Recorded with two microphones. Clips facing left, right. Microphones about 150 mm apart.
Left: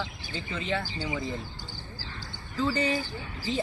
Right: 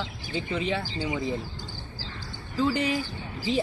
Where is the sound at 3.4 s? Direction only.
10° right (ahead or behind).